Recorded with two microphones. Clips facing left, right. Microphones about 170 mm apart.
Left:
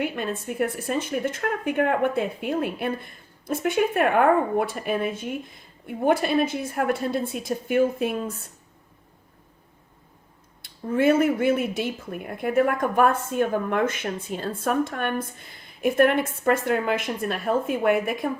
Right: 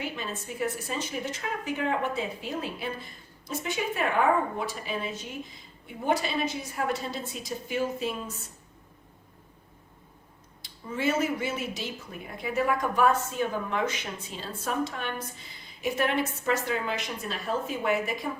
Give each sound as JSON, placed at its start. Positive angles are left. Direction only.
{"t": 0.0, "sound": "a woman's voice", "side_deg": 55}
{"t": 10.6, "sound": "speech", "side_deg": 55}